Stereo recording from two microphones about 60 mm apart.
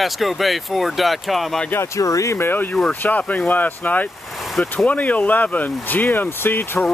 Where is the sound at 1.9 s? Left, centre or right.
Left.